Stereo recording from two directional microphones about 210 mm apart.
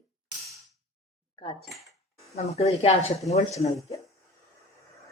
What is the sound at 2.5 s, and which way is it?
Speech, 30° left (ahead or behind).